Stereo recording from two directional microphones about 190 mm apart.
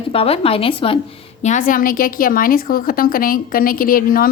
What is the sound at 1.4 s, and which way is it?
A woman's voice, 40° left (ahead or behind).